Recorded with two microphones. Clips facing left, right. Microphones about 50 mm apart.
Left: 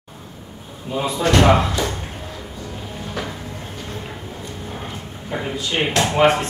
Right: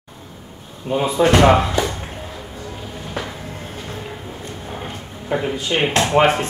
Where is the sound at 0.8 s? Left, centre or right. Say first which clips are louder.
Right 4 dB; right.